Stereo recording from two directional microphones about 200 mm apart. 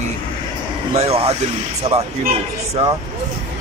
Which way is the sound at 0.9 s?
30° right (ahead or behind).